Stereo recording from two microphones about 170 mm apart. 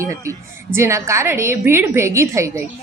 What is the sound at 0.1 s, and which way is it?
A woman's voice, 15° right (ahead or behind).